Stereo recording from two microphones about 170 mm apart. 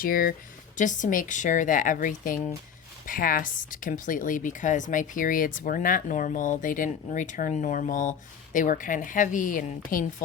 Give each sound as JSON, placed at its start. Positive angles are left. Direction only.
{"t": 0.0, "sound": "a woman's voice", "side_deg": 55}